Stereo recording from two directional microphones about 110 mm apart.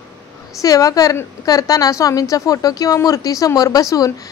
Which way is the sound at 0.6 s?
30° left (ahead or behind).